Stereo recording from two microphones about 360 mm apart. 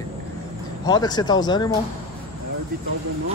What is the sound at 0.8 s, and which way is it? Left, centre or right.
Speech, centre.